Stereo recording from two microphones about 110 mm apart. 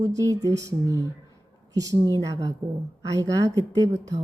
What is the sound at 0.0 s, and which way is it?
A woman's voice, 30° right (ahead or behind).